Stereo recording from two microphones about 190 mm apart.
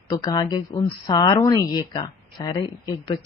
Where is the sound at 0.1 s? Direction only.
25° left (ahead or behind).